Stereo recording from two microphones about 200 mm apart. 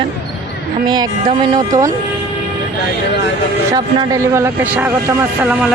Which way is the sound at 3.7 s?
15° right (ahead or behind).